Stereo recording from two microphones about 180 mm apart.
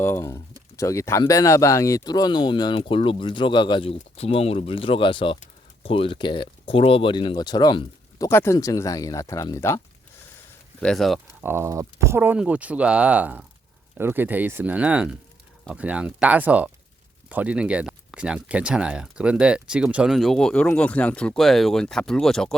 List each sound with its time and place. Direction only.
0.0 s speech: 15° left (ahead or behind)
10.8 s speech: 5° left (ahead or behind)
11.3 s speech: 15° right (ahead or behind)